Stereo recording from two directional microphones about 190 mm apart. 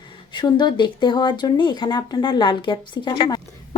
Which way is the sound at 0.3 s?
25° left (ahead or behind).